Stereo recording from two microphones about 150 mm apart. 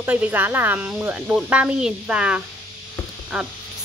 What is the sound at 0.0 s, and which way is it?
Speech, 10° right (ahead or behind).